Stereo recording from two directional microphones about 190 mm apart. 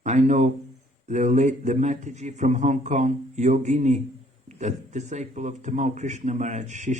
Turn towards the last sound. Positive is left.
turn(degrees=-40)  # may be behind; listen again after turning